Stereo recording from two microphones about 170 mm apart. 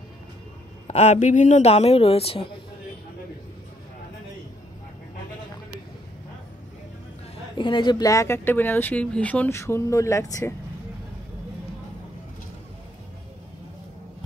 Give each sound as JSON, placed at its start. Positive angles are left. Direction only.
{"t": 0.8, "sound": "a woman's voice", "side_deg": 40}
{"t": 7.5, "sound": "speech", "side_deg": 30}